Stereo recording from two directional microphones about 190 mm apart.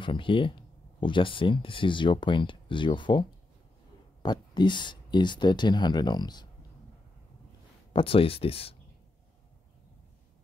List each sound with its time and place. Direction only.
0.0 s speech: 25° left (ahead or behind)
7.9 s speech: 30° left (ahead or behind)